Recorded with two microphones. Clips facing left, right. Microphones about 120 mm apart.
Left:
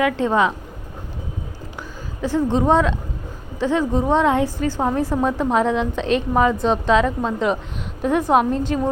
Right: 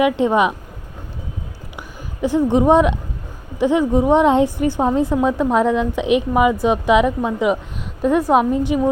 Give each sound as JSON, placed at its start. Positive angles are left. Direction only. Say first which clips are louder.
{"t": 0.0, "sound": "a woman's voice", "louder": "right 3 dB", "side_deg": -15}
{"t": 2.2, "sound": "a woman's voice", "louder": "right 4 dB", "side_deg": -15}
{"t": 8.0, "sound": "a woman's voice", "louder": "right 2 dB", "side_deg": -5}